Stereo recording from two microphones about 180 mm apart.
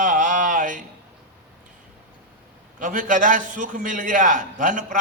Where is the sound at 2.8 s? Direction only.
45° right (ahead or behind).